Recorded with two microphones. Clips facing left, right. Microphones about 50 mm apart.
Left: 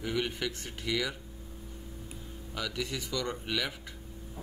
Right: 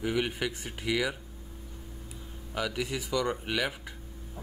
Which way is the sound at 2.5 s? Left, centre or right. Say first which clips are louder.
Right 4 dB; centre.